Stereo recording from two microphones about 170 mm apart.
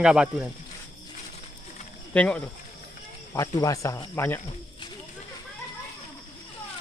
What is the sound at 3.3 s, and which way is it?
Speech, 20° left (ahead or behind).